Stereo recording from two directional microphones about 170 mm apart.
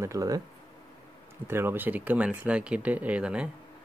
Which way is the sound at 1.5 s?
15° right (ahead or behind).